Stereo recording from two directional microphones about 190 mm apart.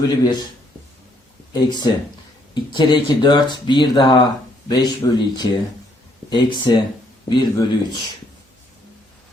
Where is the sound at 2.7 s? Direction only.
25° left (ahead or behind).